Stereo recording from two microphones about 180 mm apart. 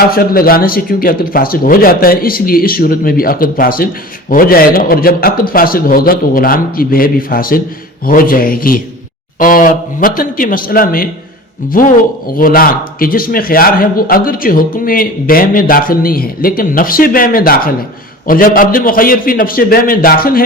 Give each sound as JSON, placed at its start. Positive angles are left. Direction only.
{"t": 0.1, "sound": "a man's voice", "side_deg": 55}